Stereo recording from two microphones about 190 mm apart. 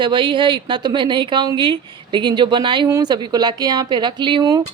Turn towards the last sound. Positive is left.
turn(degrees=-20)  # may be behind; listen again after turning